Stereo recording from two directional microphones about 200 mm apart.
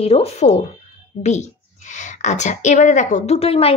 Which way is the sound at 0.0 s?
30° left (ahead or behind).